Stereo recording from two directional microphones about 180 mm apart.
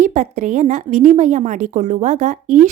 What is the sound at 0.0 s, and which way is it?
Speech, 40° right (ahead or behind).